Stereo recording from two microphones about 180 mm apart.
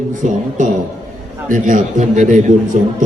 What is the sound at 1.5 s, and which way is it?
A man's voice, 50° right (ahead or behind).